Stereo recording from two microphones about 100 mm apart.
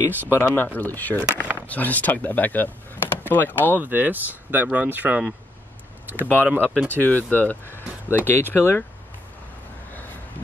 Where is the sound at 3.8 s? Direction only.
20° right (ahead or behind).